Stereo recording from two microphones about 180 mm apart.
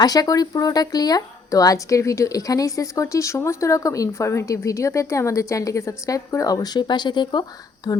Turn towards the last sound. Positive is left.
turn(degrees=25)  # may be behind; listen again after turning